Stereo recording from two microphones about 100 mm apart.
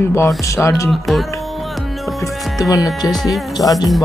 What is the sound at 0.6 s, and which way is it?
Speech, 30° left (ahead or behind).